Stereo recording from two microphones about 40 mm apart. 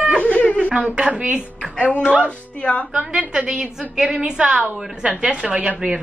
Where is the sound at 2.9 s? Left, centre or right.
Right.